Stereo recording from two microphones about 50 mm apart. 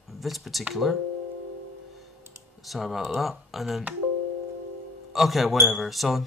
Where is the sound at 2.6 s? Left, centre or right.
Centre.